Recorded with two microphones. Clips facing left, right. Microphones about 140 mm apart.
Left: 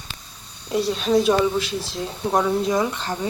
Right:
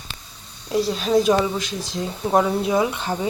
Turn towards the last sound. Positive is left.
turn(degrees=-5)  # may be behind; listen again after turning